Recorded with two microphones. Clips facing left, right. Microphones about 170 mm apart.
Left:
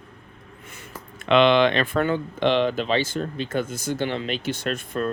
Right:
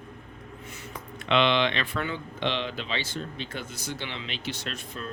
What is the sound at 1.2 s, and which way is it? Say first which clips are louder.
Speech: left 7 dB; 50° left (ahead or behind).